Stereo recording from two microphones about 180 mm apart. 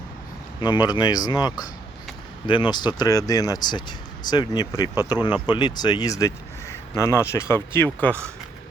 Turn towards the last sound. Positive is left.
turn(degrees=10)  # may be behind; listen again after turning